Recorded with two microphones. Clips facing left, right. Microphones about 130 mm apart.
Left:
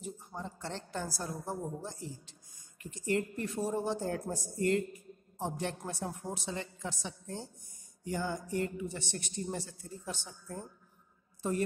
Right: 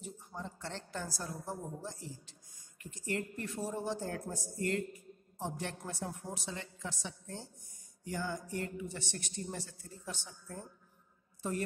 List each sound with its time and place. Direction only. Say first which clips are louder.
0.4 s speech: left 1 dB; 15° left (ahead or behind)